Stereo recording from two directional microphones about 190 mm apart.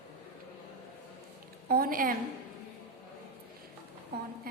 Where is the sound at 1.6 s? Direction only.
50° right (ahead or behind).